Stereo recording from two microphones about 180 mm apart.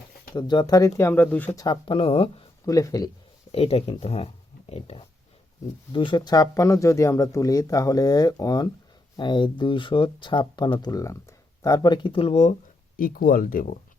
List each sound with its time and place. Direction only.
0.3 s speech: 25° left (ahead or behind)
1.6 s speech: 25° left (ahead or behind)
2.6 s speech: 20° left (ahead or behind)
3.5 s speech: 30° left (ahead or behind)
13.0 s speech: 55° left (ahead or behind)